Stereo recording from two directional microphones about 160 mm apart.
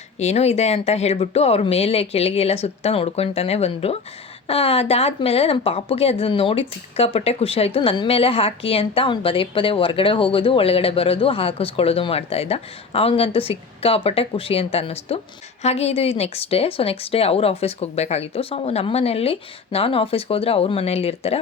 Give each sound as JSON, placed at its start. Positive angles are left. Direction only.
{"t": 0.2, "sound": "speech", "side_deg": 40}